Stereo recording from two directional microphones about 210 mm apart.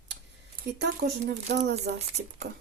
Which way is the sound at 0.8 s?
55° right (ahead or behind).